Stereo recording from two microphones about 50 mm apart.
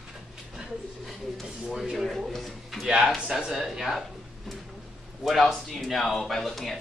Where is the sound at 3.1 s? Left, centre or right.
Centre.